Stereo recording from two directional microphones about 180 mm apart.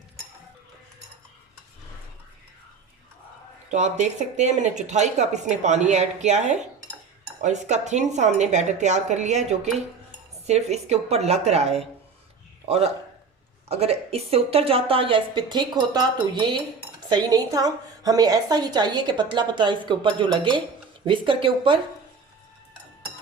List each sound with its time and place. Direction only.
3.7 s a woman's voice: 40° right (ahead or behind)